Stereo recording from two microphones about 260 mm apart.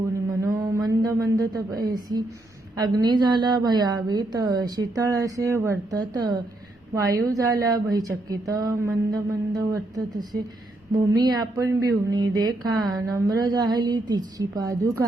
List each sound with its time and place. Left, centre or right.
0.3 s mantra: centre
2.7 s a woman's voice: centre